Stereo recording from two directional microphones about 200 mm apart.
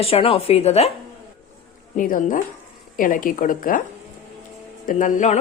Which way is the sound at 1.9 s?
40° left (ahead or behind).